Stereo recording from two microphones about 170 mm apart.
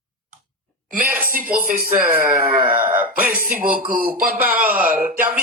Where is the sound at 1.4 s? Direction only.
10° right (ahead or behind).